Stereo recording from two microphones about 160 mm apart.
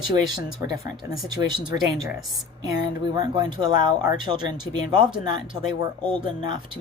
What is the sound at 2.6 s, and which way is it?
Speech, 25° right (ahead or behind).